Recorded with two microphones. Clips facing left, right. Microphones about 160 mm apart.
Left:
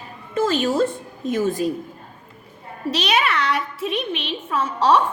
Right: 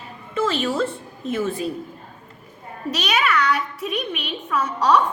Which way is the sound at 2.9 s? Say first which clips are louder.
Even; 30° left (ahead or behind).